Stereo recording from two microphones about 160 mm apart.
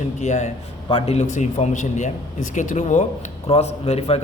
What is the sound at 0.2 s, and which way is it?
A man's voice, 45° left (ahead or behind).